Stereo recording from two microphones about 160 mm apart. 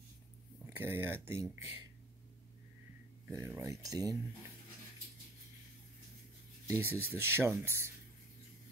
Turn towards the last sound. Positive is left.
turn(degrees=-15)  # may be behind; listen again after turning